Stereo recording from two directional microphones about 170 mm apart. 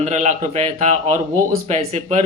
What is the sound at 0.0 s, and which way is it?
Speech, 45° right (ahead or behind).